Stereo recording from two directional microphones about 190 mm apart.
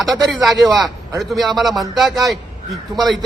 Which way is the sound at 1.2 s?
Centre (ahead or behind).